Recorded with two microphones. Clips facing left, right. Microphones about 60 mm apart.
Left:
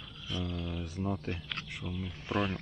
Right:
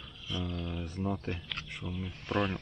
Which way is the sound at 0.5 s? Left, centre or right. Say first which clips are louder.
Even; centre.